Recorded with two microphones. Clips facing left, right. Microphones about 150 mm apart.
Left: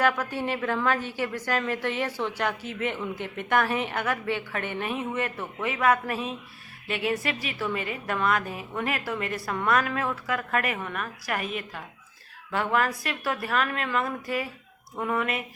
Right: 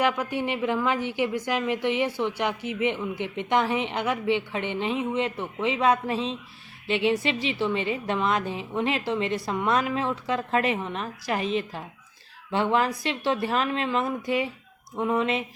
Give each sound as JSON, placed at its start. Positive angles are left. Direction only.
{"t": 0.0, "sound": "a woman's voice", "side_deg": -15}